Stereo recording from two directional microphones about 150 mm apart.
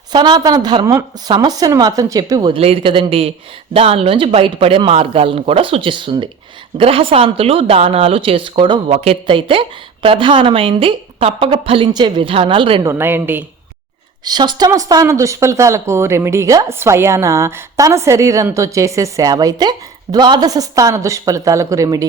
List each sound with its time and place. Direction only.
0.1 s speech: 30° right (ahead or behind)
2.6 s speech: 40° right (ahead or behind)
12.8 s a woman's voice: 15° right (ahead or behind)
14.3 s speech: 30° right (ahead or behind)